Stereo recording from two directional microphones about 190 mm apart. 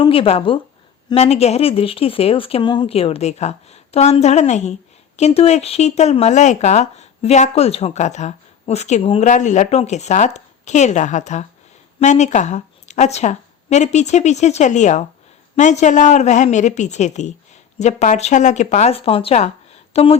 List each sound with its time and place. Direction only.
0.0 s speech: 30° left (ahead or behind)